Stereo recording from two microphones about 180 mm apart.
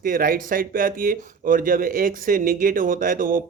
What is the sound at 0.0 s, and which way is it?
Speech, 50° right (ahead or behind).